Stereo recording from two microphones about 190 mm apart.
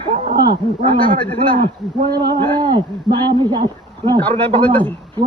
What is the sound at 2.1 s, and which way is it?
Speech, 20° right (ahead or behind).